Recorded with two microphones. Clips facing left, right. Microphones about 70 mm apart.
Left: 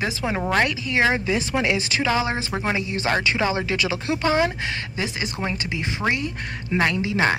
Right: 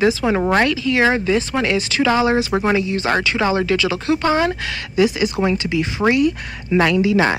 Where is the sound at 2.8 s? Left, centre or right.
Left.